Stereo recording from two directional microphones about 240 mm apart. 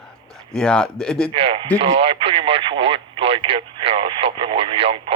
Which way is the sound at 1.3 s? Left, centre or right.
Right.